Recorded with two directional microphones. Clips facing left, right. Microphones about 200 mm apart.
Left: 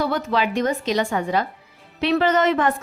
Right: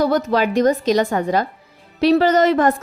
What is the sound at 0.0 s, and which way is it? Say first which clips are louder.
A woman's voice: right 5 dB; 40° right (ahead or behind).